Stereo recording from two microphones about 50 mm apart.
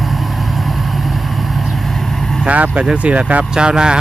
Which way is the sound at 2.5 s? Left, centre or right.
Right.